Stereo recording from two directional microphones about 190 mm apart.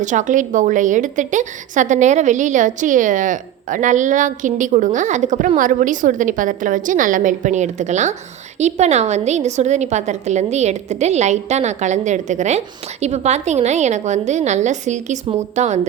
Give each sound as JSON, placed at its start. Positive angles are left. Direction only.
{"t": 0.0, "sound": "a woman's voice", "side_deg": -40}